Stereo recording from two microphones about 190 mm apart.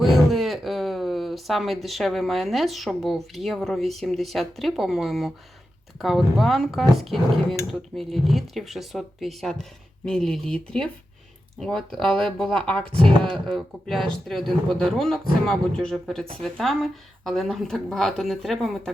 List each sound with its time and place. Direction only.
0.0 s speech: centre (ahead or behind)
12.9 s speech: 25° right (ahead or behind)
13.3 s speech: centre (ahead or behind)